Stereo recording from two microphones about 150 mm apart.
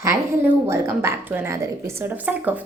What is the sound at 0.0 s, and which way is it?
A woman's voice, 20° right (ahead or behind).